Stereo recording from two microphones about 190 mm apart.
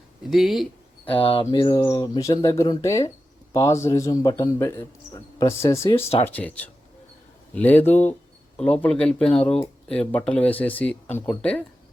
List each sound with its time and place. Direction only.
0.3 s speech: centre (ahead or behind)
1.0 s a man's voice: 30° left (ahead or behind)
6.2 s a man's voice: 10° left (ahead or behind)